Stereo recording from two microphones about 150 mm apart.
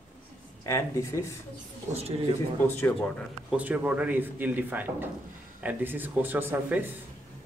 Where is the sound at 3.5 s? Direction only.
10° right (ahead or behind).